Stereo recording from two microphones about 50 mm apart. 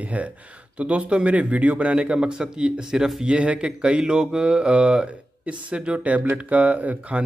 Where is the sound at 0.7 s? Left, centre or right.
Right.